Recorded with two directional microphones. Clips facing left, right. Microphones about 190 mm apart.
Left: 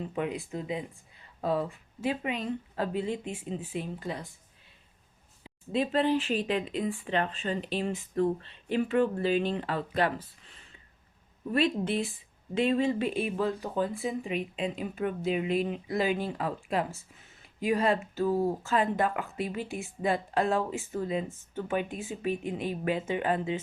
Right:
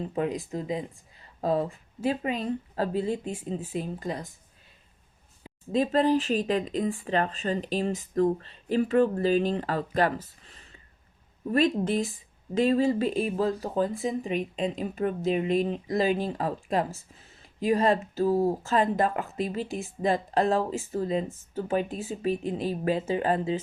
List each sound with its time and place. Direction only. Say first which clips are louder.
0.0 s speech: right 3 dB; 35° right (ahead or behind)
5.4 s a woman's voice: right 3 dB; 40° right (ahead or behind)